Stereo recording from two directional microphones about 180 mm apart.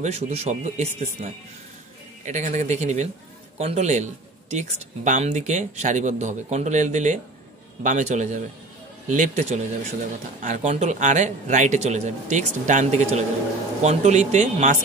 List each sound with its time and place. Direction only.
0.0 s speech: 35° right (ahead or behind)